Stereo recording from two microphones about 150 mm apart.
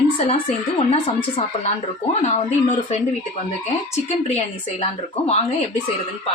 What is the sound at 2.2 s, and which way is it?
Speech, 45° left (ahead or behind).